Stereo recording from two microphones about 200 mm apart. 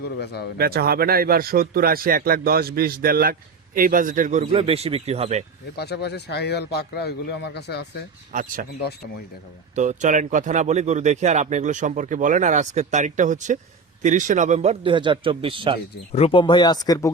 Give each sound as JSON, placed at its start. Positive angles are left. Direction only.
{"t": 0.2, "sound": "a man's voice", "side_deg": 55}
{"t": 0.6, "sound": "speech", "side_deg": -50}
{"t": 5.7, "sound": "a man's voice", "side_deg": 55}
{"t": 8.3, "sound": "speech", "side_deg": -40}
{"t": 9.7, "sound": "a man's voice", "side_deg": -40}
{"t": 16.1, "sound": "speech", "side_deg": 30}